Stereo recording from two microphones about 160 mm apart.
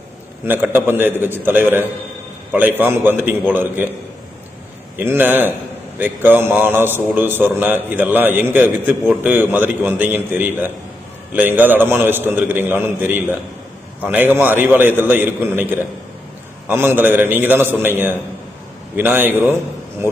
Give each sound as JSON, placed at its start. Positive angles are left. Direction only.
{"t": 0.4, "sound": "a man's voice", "side_deg": -15}
{"t": 4.9, "sound": "a man's voice", "side_deg": -10}